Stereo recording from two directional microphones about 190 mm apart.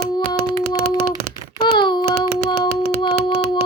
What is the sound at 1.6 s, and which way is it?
Child singing, 25° left (ahead or behind).